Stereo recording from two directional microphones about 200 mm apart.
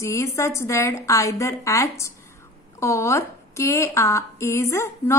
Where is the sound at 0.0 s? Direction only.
15° left (ahead or behind).